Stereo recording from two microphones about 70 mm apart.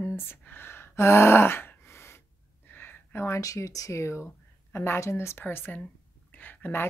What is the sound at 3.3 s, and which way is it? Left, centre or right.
Speech, left.